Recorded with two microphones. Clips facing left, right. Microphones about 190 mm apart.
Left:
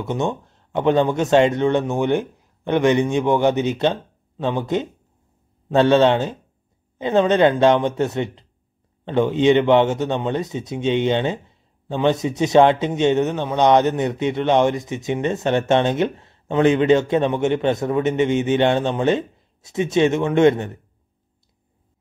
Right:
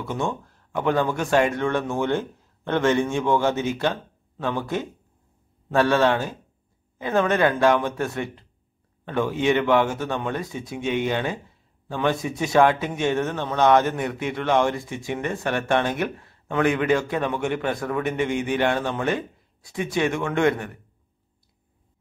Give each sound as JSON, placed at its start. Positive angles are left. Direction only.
{"t": 0.0, "sound": "a man's voice", "side_deg": 20}